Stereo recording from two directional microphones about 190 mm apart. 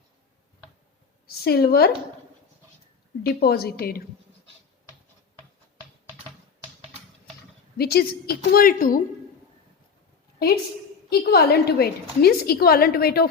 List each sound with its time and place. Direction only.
1.5 s a woman's voice: 55° left (ahead or behind)
3.2 s a woman's voice: 55° left (ahead or behind)
7.8 s a woman's voice: 55° left (ahead or behind)
11.1 s a woman's voice: 55° left (ahead or behind)